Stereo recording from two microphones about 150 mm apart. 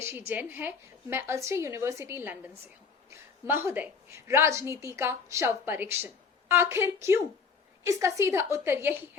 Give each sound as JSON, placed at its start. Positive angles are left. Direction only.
{"t": 0.0, "sound": "a woman's voice", "side_deg": -15}